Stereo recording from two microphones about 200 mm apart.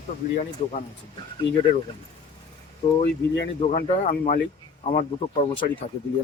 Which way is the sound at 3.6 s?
40° left (ahead or behind).